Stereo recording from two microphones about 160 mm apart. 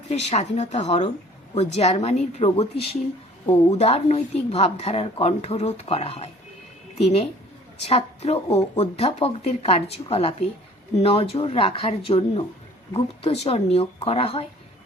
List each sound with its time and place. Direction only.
0.1 s speech: 45° left (ahead or behind)